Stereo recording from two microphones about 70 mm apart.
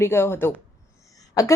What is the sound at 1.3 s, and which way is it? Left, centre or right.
Speech, left.